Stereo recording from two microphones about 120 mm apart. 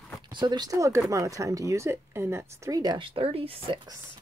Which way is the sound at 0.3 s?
40° right (ahead or behind).